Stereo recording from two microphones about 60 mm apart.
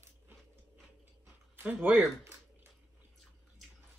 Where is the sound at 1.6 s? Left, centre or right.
Right.